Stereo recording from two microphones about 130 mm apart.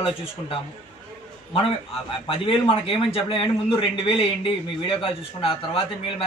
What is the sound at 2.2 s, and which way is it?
Speech, 45° left (ahead or behind).